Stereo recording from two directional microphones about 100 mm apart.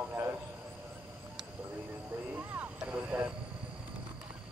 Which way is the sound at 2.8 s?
20° right (ahead or behind).